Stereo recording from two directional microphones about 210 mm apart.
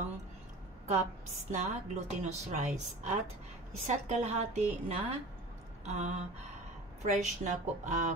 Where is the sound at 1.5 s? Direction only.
35° right (ahead or behind).